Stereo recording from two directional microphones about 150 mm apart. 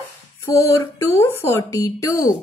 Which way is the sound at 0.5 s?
20° left (ahead or behind).